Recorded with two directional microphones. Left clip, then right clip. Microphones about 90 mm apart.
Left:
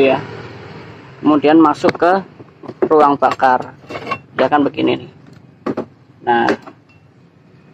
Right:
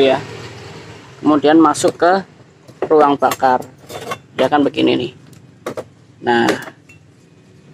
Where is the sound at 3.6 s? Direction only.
25° right (ahead or behind).